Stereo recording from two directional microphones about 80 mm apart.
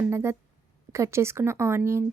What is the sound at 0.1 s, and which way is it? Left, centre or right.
Speech, right.